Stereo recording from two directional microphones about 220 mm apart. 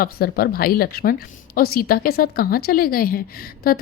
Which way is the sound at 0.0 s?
45° left (ahead or behind).